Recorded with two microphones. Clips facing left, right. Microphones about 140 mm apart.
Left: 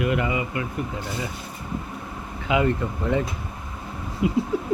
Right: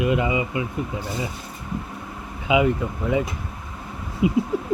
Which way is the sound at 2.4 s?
10° right (ahead or behind).